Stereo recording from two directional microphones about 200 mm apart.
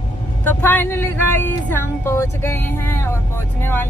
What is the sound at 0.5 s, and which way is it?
Speech, 10° left (ahead or behind).